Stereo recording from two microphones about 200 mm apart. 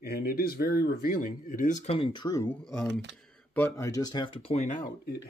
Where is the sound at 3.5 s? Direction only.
10° left (ahead or behind); by 5.1 s 40° left (ahead or behind).